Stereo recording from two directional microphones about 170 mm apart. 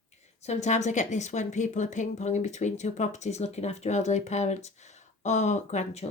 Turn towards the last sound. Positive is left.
turn(degrees=40)  # may be behind; listen again after turning